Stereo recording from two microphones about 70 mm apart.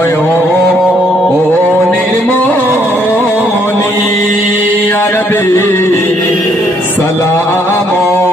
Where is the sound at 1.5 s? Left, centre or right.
Left.